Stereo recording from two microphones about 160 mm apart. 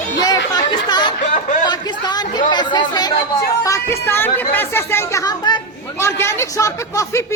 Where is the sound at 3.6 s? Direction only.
20° left (ahead or behind).